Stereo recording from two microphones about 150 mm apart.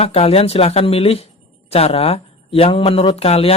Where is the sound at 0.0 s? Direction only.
40° left (ahead or behind).